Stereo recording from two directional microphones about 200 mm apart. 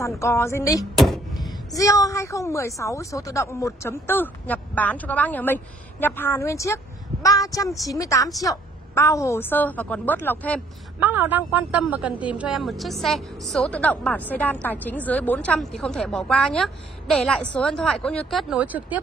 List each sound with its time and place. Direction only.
0.2 s a woman's voice: 15° left (ahead or behind)
0.9 s a sound: centre (ahead or behind)
1.7 s a woman's voice: 15° left (ahead or behind)
11.0 s a woman's voice: 10° right (ahead or behind)